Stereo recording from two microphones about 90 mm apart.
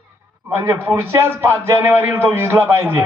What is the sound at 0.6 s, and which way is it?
A man's voice, 30° right (ahead or behind).